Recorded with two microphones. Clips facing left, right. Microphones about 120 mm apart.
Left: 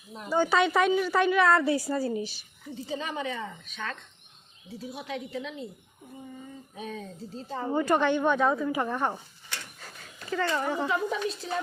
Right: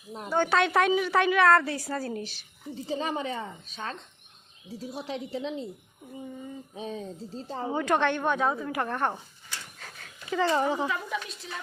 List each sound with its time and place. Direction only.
0.3 s a woman's voice: 10° left (ahead or behind)
1.6 s a woman's voice: 10° left (ahead or behind)
2.8 s a woman's voice: 35° right (ahead or behind)
5.0 s a woman's voice: 30° right (ahead or behind)
6.7 s a woman's voice: 30° right (ahead or behind)
7.8 s a woman's voice: 5° left (ahead or behind)
8.2 s a woman's voice: 5° right (ahead or behind)
9.7 s a sound: 5° left (ahead or behind)
10.4 s speech: 20° right (ahead or behind)
10.8 s speech: 35° left (ahead or behind)